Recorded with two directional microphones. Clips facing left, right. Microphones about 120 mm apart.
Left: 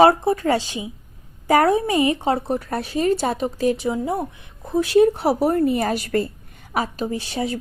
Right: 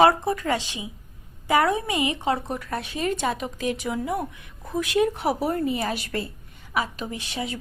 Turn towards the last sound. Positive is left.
turn(degrees=40)  # may be behind; listen again after turning